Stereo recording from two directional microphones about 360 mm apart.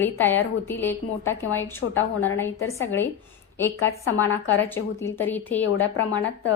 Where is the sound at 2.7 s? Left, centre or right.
Centre.